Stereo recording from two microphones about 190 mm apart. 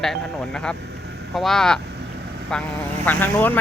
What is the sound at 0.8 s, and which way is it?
Vehicle, 60° right (ahead or behind).